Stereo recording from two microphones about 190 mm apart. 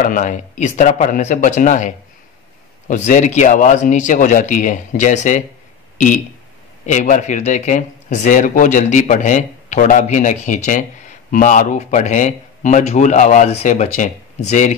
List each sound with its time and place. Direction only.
0.0 s speech: 45° left (ahead or behind)
6.9 s speech: 40° left (ahead or behind)